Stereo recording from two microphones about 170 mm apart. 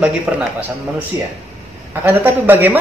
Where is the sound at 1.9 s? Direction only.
10° right (ahead or behind).